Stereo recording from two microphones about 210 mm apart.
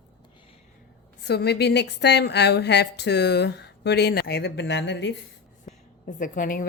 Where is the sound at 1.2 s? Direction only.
50° left (ahead or behind).